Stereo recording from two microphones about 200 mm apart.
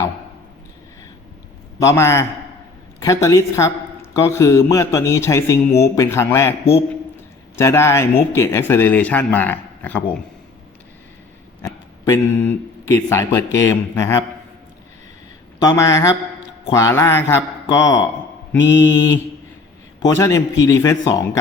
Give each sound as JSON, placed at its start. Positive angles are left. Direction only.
{"t": 1.8, "sound": "speech", "side_deg": 15}
{"t": 7.5, "sound": "speech", "side_deg": 10}
{"t": 11.6, "sound": "speech", "side_deg": 15}
{"t": 15.6, "sound": "speech", "side_deg": 15}